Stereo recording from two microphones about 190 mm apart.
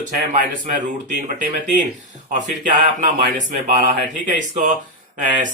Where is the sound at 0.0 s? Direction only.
45° right (ahead or behind).